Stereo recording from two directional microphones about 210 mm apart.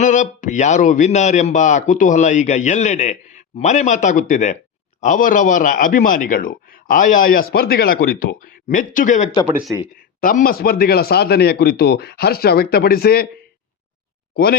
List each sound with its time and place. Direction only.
0.0 s a man's voice: 35° left (ahead or behind)